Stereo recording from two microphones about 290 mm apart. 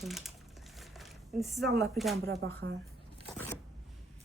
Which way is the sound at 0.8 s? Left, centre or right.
Centre.